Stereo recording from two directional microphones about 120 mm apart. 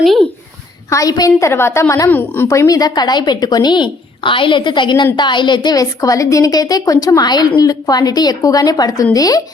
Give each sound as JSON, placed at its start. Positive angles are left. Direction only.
{"t": 0.9, "sound": "a woman's voice", "side_deg": 30}